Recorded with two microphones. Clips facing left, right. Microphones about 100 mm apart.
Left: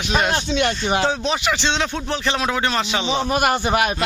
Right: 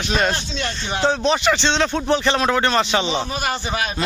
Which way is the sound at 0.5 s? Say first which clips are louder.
Left 6 dB; 60° left (ahead or behind).